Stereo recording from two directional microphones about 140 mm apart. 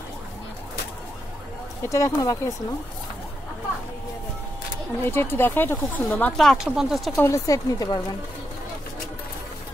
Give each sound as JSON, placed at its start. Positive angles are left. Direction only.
{"t": 1.9, "sound": "speech", "side_deg": 20}
{"t": 5.0, "sound": "speech", "side_deg": 15}
{"t": 6.3, "sound": "speech", "side_deg": 0}
{"t": 7.2, "sound": "speech", "side_deg": 20}